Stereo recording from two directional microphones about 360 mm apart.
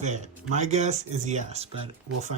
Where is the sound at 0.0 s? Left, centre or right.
Centre.